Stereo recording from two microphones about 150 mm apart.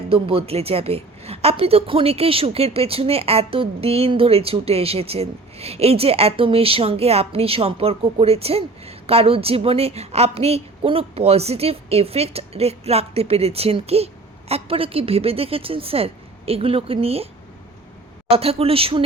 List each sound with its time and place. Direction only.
0.1 s a woman's voice: 40° right (ahead or behind)
18.3 s a woman's voice: 40° right (ahead or behind)